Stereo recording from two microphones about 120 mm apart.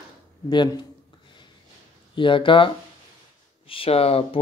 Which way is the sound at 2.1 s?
45° left (ahead or behind).